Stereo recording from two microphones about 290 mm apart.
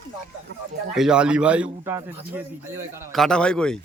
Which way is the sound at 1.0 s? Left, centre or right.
Centre.